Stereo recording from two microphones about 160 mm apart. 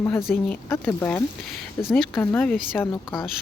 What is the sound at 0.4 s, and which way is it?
Speech, 10° left (ahead or behind).